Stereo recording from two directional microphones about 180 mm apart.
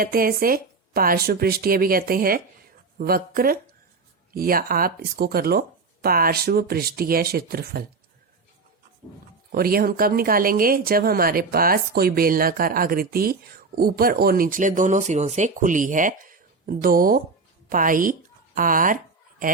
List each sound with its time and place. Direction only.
0.0 s speech: 55° right (ahead or behind)
9.5 s a woman's voice: 55° right (ahead or behind)